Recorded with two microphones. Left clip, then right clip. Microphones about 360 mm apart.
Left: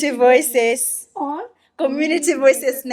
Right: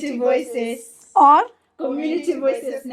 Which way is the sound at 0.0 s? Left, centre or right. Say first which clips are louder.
Left 6 dB; left.